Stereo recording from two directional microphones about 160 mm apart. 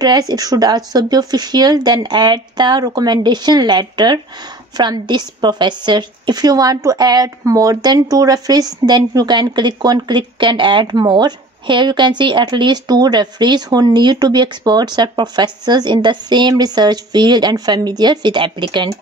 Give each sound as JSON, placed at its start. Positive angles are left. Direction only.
{"t": 0.0, "sound": "a woman's voice", "side_deg": -25}